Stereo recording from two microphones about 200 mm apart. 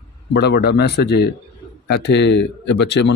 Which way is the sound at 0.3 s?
55° left (ahead or behind).